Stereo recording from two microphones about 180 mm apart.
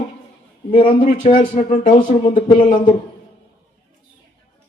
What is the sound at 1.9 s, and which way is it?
Speech, 45° left (ahead or behind).